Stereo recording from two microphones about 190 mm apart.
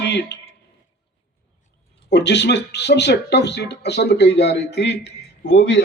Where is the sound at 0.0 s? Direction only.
65° left (ahead or behind).